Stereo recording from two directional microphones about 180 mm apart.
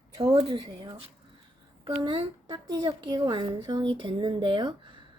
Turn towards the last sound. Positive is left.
turn(degrees=-25)  # may be behind; listen again after turning